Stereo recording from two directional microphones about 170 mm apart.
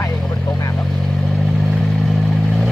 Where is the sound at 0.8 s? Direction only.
Centre (ahead or behind).